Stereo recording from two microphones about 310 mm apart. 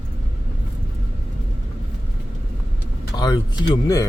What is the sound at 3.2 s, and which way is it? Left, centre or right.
Speech, centre.